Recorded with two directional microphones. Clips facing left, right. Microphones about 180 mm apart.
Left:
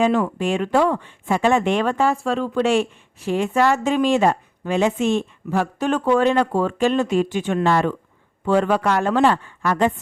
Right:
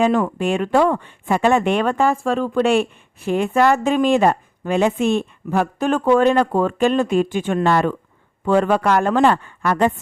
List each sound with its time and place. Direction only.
0.0 s speech: 50° right (ahead or behind)